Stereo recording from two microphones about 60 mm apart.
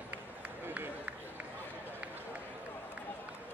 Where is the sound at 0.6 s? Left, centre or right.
Right.